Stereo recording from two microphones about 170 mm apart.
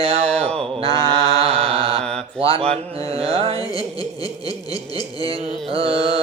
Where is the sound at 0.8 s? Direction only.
20° left (ahead or behind).